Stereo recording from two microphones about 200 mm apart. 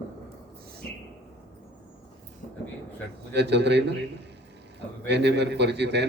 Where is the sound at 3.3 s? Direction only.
60° right (ahead or behind).